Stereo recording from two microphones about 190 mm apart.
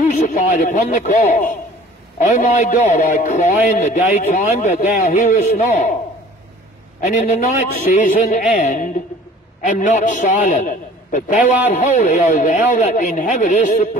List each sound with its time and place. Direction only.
0.0 s a man's voice: 40° left (ahead or behind)
7.2 s a man's voice: 35° left (ahead or behind)